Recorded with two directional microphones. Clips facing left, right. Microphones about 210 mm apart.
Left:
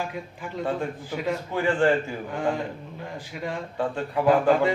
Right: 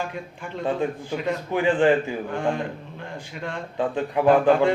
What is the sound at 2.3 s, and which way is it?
A man's voice, 5° left (ahead or behind).